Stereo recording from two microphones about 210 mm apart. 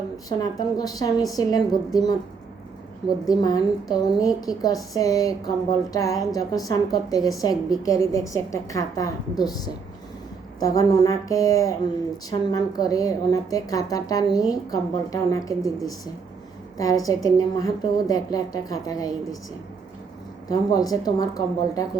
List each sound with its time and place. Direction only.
0.3 s a woman's voice: 15° left (ahead or behind)
3.2 s a woman's voice: 15° left (ahead or behind)
20.5 s a woman's voice: 15° left (ahead or behind)